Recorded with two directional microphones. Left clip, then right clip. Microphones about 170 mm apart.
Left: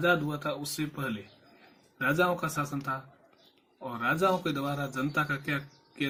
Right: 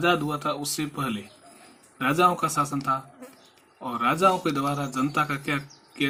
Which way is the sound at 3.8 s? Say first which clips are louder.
Right 6 dB; 30° right (ahead or behind).